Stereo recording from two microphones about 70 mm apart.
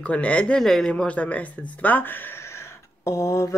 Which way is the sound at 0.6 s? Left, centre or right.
Centre.